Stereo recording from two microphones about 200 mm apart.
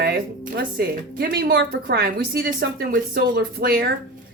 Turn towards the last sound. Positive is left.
turn(degrees=-50)  # may be behind; listen again after turning